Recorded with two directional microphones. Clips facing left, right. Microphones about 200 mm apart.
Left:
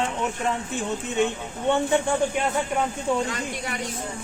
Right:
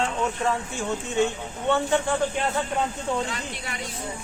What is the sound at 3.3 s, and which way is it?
Speech, 45° left (ahead or behind).